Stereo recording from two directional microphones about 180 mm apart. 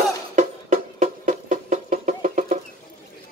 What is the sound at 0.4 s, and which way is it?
Music, 45° right (ahead or behind).